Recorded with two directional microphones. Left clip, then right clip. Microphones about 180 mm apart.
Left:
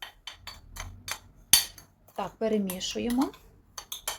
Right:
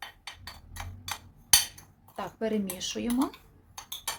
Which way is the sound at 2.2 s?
15° left (ahead or behind).